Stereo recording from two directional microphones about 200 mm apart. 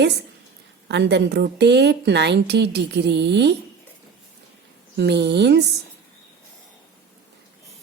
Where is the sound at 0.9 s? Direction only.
60° right (ahead or behind).